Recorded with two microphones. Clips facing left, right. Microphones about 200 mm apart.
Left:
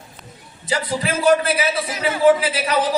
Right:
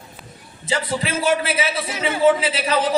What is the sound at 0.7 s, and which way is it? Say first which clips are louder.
A man's voice: left 1 dB; 25° right (ahead or behind).